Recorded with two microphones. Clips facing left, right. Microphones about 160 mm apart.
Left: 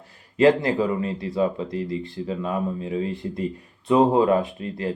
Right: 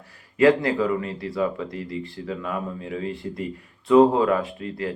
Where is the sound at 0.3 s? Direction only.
25° left (ahead or behind).